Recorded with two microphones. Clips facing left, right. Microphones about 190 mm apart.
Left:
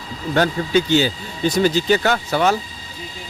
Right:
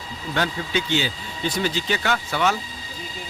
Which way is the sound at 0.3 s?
45° left (ahead or behind).